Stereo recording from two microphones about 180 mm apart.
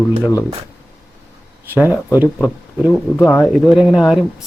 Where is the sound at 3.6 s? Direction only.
5° right (ahead or behind).